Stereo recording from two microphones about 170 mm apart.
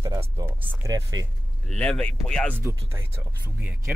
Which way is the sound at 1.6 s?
5° left (ahead or behind).